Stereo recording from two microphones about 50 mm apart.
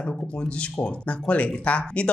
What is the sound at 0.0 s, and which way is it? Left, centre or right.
Speech, left.